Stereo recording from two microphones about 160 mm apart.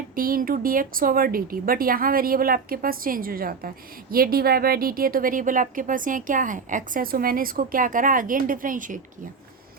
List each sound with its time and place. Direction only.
0.2 s a woman's voice: 60° right (ahead or behind)